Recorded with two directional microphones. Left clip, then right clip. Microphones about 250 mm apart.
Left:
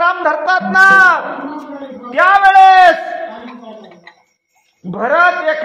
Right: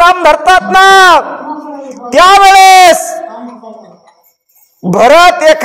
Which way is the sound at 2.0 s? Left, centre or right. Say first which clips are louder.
Right 6 dB; right.